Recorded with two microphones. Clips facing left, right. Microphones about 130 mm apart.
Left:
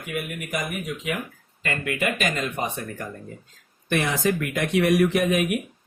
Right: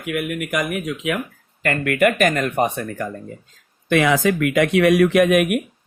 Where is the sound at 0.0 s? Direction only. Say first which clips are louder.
Right 7 dB; 65° right (ahead or behind).